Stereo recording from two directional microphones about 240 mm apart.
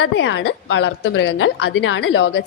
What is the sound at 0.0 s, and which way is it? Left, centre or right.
A woman's voice, left.